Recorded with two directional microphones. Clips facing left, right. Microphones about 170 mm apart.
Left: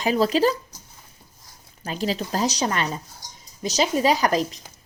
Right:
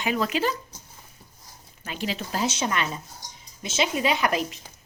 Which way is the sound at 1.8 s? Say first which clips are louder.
Left 5 dB; 35° left (ahead or behind).